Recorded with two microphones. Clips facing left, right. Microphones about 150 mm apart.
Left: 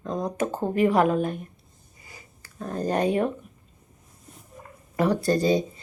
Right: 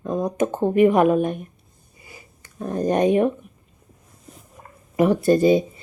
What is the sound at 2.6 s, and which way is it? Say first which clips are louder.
Speech: right 5 dB; 20° right (ahead or behind).